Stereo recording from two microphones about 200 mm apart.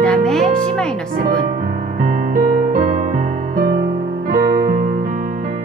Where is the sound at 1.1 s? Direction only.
45° right (ahead or behind).